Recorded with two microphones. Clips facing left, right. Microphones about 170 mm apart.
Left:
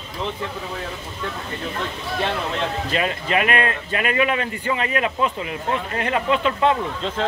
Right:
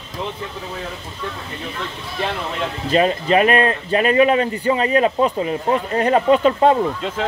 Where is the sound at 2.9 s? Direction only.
35° right (ahead or behind).